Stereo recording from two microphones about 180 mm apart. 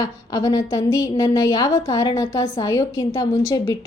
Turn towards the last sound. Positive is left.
turn(degrees=20)  # may be behind; listen again after turning